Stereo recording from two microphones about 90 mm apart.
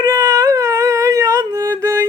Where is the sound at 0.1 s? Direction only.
45° right (ahead or behind).